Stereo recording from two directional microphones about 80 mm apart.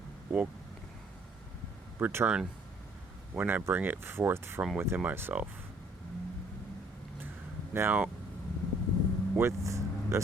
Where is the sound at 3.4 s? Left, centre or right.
Right.